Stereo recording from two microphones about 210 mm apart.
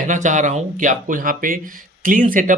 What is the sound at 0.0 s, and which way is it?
Speech, 35° right (ahead or behind).